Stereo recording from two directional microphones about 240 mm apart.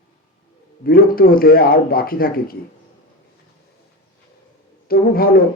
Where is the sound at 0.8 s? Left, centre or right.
Left.